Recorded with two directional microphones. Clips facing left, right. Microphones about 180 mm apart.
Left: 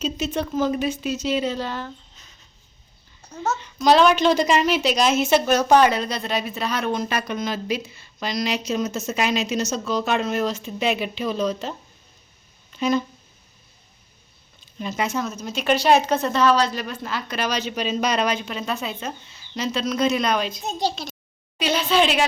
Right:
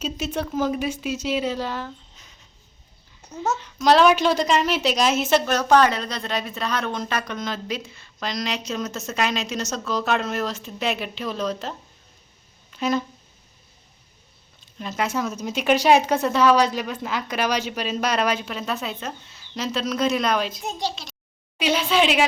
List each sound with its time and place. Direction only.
0.0 s speech: 10° right (ahead or behind)
3.2 s babbling: 5° right (ahead or behind)
3.8 s speech: 5° right (ahead or behind)
5.5 s speech: 10° left (ahead or behind)
12.7 s speech: centre (ahead or behind)
14.8 s speech: centre (ahead or behind)
20.8 s a child's voice: 40° left (ahead or behind)
21.6 s a woman's voice: 10° right (ahead or behind)